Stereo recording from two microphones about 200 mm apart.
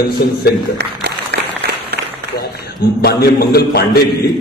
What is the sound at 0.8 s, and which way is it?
Applause, 55° right (ahead or behind).